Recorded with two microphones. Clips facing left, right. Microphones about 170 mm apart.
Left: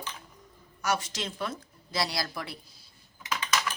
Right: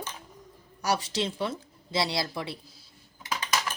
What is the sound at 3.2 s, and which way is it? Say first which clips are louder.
Typing: even; 35° right (ahead or behind).